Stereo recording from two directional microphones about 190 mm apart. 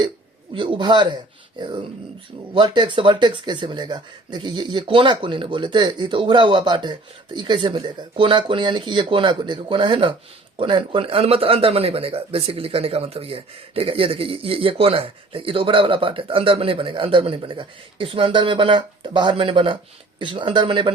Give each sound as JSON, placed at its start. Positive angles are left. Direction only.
{"t": 0.5, "sound": "speech", "side_deg": -25}